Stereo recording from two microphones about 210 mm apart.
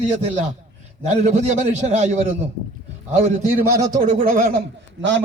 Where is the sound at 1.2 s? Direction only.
35° right (ahead or behind).